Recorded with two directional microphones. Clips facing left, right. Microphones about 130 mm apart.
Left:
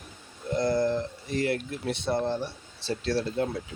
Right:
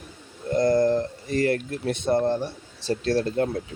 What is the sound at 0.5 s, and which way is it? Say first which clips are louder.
Speech: right 5 dB; 45° right (ahead or behind).